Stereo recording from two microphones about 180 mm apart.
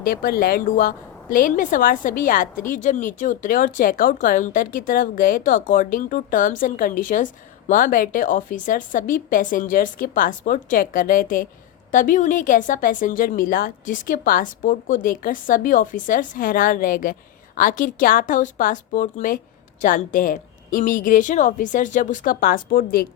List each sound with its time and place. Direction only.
0.0 s a woman's voice: 55° left (ahead or behind)